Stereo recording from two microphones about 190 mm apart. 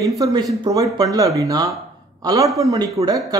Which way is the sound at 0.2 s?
20° right (ahead or behind).